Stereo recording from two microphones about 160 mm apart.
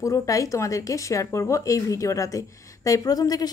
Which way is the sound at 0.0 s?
20° left (ahead or behind).